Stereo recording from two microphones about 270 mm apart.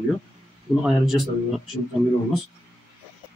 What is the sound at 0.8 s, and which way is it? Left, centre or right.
Speech, centre.